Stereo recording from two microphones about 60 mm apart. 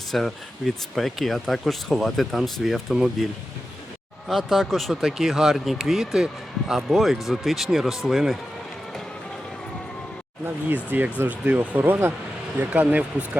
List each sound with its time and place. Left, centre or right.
0.1 s speech: centre
4.3 s speech: centre
10.9 s speech: right